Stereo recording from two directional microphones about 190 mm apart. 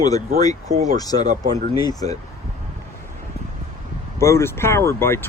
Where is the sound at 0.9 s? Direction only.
20° left (ahead or behind).